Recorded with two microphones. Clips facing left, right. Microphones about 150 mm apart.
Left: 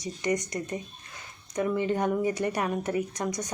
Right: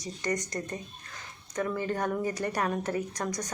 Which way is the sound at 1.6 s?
15° left (ahead or behind).